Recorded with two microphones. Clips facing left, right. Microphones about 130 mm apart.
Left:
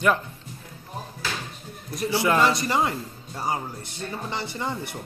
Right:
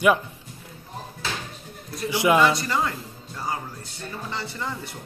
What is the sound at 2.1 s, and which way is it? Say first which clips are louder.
Speech: right 3 dB; 15° right (ahead or behind).